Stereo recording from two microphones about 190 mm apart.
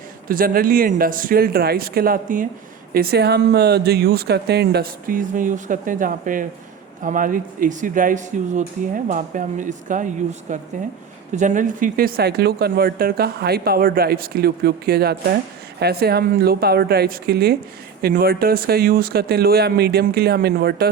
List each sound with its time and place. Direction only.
0.3 s speech: 50° right (ahead or behind)